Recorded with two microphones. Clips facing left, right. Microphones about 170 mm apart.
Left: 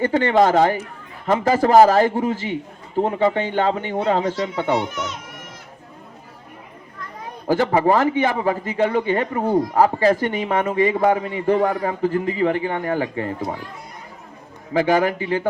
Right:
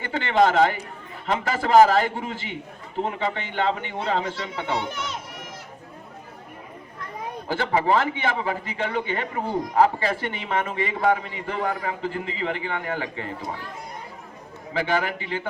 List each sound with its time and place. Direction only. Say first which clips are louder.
0.0 s a man's voice: left 4 dB; 40° left (ahead or behind)
7.4 s a man's voice: left 6 dB; 40° left (ahead or behind)
14.7 s a man's voice: left 7 dB; 45° left (ahead or behind)